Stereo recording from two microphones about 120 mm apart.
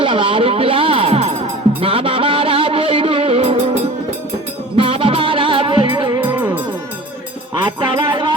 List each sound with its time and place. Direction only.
0.0 s music: 45° right (ahead or behind)
4.8 s music: 45° right (ahead or behind)
6.2 s music: 20° right (ahead or behind)
7.6 s music: 40° right (ahead or behind)